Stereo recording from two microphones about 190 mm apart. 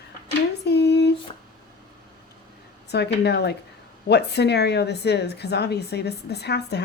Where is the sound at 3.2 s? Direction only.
60° left (ahead or behind).